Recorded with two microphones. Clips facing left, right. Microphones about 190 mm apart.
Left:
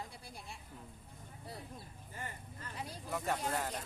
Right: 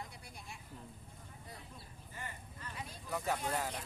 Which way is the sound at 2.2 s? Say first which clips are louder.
Left 2 dB; 40° left (ahead or behind).